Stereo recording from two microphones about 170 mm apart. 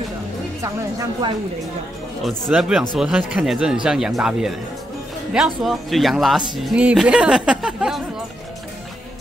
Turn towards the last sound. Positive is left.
turn(degrees=-5)  # may be behind; listen again after turning